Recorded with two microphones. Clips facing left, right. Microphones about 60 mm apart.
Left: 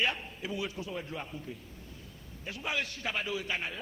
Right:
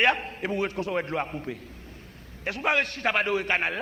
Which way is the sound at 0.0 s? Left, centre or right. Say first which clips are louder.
Right 9 dB; right.